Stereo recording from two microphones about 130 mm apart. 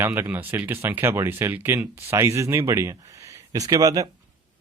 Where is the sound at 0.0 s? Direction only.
15° right (ahead or behind).